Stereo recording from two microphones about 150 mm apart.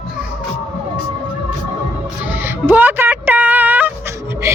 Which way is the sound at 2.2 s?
15° right (ahead or behind).